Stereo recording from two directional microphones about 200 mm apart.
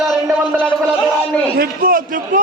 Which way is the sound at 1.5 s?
45° right (ahead or behind).